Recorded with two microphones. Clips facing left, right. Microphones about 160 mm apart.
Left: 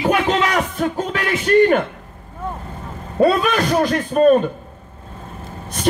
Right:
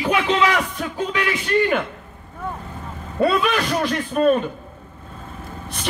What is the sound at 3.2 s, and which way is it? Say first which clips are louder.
A man's voice: left 3 dB; 40° left (ahead or behind).